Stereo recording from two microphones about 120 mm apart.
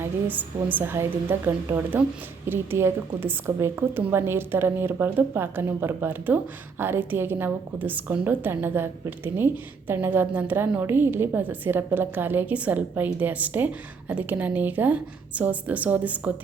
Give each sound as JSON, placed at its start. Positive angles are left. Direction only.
{"t": 0.0, "sound": "a woman's voice", "side_deg": -15}